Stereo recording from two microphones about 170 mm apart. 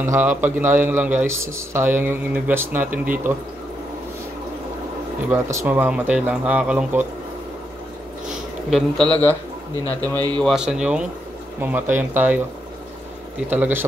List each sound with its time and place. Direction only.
0.0 s a man's voice: 10° right (ahead or behind)
5.3 s a man's voice: 15° right (ahead or behind)
8.3 s speech: centre (ahead or behind)
10.1 s a man's voice: 25° right (ahead or behind)
10.4 s a man's voice: 5° right (ahead or behind)
13.5 s a man's voice: 10° right (ahead or behind)